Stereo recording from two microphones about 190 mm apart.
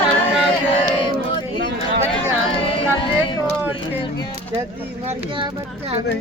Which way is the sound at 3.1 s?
25° left (ahead or behind).